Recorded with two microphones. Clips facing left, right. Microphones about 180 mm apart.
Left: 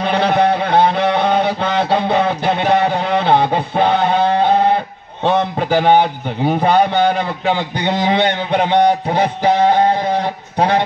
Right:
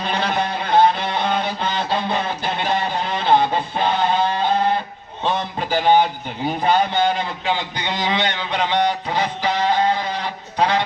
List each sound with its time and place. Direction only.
0.0 s a sound: 55° left (ahead or behind)
5.2 s a man's voice: 60° left (ahead or behind)
9.1 s music: 55° left (ahead or behind)